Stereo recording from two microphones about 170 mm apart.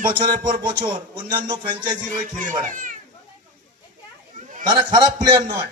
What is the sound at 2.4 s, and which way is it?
Speech, 45° right (ahead or behind).